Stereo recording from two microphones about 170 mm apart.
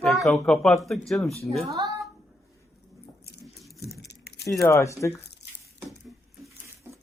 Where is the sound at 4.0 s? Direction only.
80° left.